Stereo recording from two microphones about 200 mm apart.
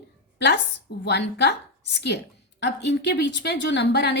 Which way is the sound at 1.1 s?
60° left (ahead or behind).